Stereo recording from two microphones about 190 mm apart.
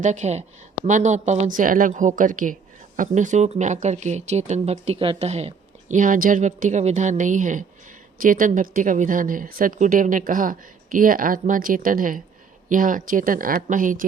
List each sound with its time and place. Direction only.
0.0 s a woman's voice: 40° right (ahead or behind)